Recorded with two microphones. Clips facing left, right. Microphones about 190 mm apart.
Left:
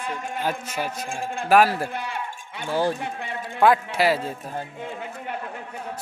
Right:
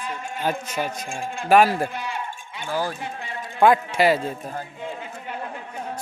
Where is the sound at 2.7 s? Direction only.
25° left (ahead or behind).